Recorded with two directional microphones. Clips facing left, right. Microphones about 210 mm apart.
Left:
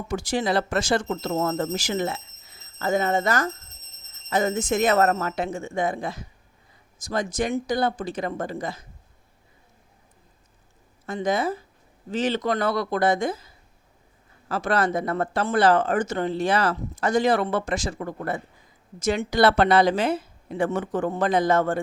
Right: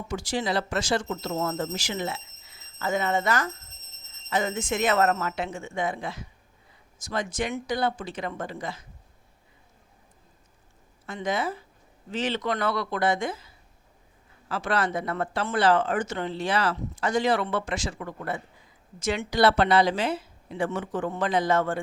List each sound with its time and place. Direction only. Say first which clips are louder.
0.1 s speech: left 4 dB; 45° left (ahead or behind)
11.0 s speech: left 4 dB; 40° left (ahead or behind)